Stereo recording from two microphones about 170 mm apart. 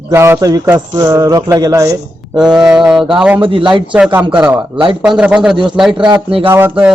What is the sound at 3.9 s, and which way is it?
Speech, 5° right (ahead or behind).